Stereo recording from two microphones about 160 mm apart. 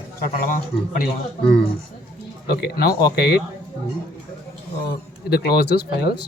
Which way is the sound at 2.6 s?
75° left (ahead or behind).